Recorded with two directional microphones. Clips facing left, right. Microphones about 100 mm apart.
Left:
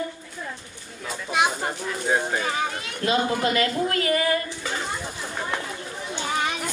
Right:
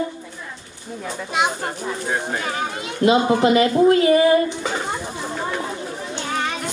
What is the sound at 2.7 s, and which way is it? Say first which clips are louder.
Speech: right 7 dB; 20° right (ahead or behind).